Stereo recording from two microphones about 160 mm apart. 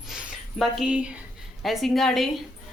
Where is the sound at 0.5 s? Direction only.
5° right (ahead or behind).